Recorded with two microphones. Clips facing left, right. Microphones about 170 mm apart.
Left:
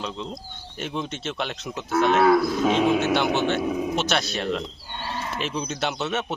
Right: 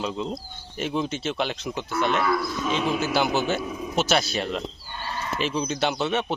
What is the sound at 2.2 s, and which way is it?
Speech, 70° left (ahead or behind).